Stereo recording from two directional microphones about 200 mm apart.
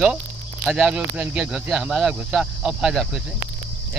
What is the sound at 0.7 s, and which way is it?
Speech, 5° right (ahead or behind).